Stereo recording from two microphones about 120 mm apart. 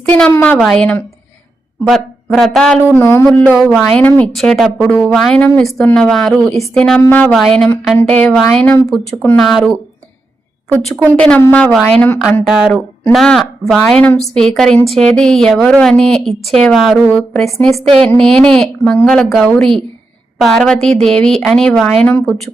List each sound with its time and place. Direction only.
0.0 s a woman's voice: 10° left (ahead or behind)
2.9 s speech: 20° left (ahead or behind)
3.6 s a woman's voice: centre (ahead or behind)
8.9 s speech: centre (ahead or behind)
10.8 s a woman's voice: 10° left (ahead or behind)
12.5 s a woman's voice: 5° right (ahead or behind)